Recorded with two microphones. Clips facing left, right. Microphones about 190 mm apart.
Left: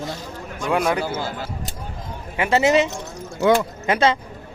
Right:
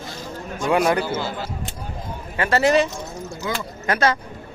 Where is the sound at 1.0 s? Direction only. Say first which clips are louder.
Right 1 dB; 45° left (ahead or behind).